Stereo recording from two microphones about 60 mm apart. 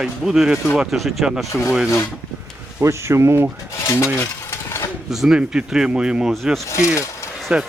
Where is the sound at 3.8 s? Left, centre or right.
Left.